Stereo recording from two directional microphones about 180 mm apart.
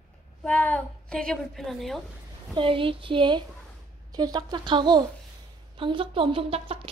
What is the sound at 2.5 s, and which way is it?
A woman's voice, 30° right (ahead or behind).